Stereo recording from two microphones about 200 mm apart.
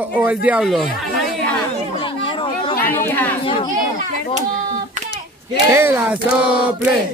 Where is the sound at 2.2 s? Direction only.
25° left (ahead or behind).